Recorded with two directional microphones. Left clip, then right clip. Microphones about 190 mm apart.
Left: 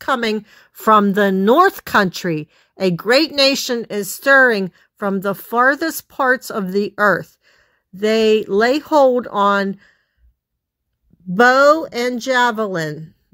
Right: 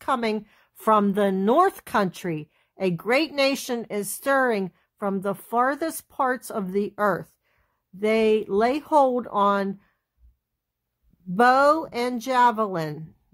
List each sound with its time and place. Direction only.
0.0 s speech: 20° left (ahead or behind)
11.3 s speech: 10° left (ahead or behind)